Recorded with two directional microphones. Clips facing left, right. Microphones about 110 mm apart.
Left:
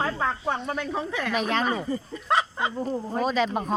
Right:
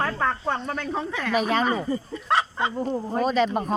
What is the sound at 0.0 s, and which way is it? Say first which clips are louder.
Speech: right 1 dB; 10° left (ahead or behind).